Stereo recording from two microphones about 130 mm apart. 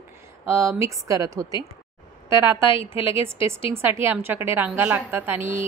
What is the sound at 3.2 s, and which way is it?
A woman's voice, 20° right (ahead or behind).